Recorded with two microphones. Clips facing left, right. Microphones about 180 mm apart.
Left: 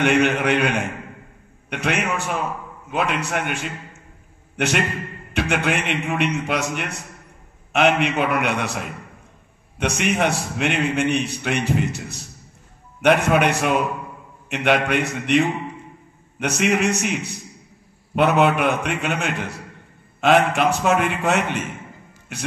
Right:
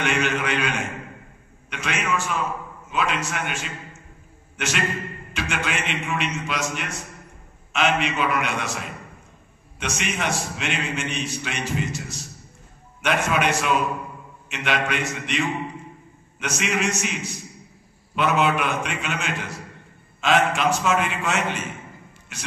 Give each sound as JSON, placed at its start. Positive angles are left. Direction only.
{"t": 0.0, "sound": "a man's voice", "side_deg": 60}